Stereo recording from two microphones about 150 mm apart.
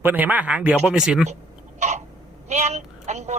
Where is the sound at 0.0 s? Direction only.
10° right (ahead or behind).